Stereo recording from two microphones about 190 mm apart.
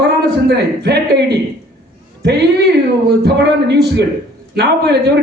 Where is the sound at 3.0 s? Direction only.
60° right (ahead or behind).